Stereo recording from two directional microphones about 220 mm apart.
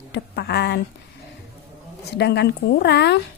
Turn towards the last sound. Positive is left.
turn(degrees=50)  # may be behind; listen again after turning